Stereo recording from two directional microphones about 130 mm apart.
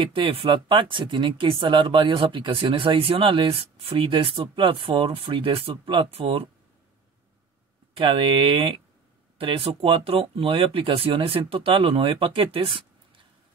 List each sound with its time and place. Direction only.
0.0 s speech: 40° right (ahead or behind)
7.9 s speech: 40° right (ahead or behind)